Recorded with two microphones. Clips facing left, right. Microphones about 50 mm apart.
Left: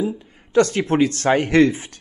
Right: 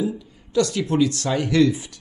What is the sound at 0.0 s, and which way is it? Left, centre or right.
A man's voice, left.